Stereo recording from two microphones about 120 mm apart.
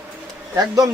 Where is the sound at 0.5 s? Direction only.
30° right (ahead or behind).